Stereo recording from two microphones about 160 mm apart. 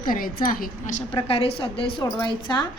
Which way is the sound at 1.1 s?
40° left (ahead or behind).